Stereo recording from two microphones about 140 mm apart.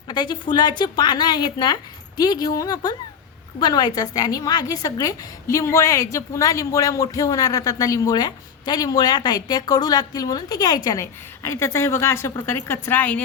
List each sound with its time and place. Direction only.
0.1 s a woman's voice: 30° left (ahead or behind); by 13.2 s 10° left (ahead or behind)